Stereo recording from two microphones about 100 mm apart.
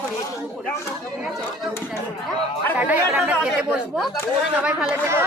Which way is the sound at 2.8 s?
15° right (ahead or behind).